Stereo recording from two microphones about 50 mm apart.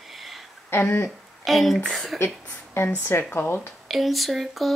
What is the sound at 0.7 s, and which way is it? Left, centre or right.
Speech, left.